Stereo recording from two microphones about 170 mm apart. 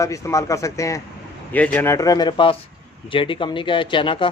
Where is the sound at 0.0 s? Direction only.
20° left (ahead or behind).